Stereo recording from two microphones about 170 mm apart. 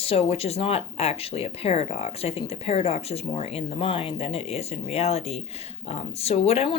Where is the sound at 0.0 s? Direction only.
35° left (ahead or behind).